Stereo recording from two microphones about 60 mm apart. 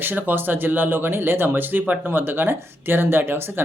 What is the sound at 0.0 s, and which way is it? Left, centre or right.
Speech, right.